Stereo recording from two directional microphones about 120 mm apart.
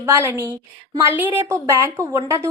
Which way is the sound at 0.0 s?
25° right (ahead or behind).